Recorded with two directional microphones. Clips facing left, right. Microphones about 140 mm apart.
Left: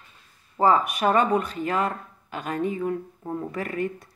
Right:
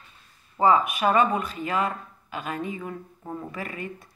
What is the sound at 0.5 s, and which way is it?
Speech, 40° left (ahead or behind).